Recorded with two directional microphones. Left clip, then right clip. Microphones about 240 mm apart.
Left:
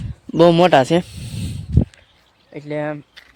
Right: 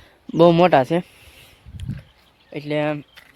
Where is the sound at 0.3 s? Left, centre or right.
Centre.